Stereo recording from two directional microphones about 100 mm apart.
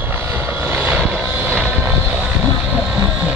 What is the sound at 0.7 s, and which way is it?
Vehicle, 20° right (ahead or behind).